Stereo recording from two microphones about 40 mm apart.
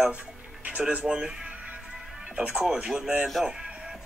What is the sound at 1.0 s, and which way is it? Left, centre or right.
Speech, centre.